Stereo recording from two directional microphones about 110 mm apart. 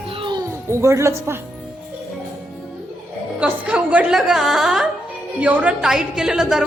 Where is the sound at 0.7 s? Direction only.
25° right (ahead or behind).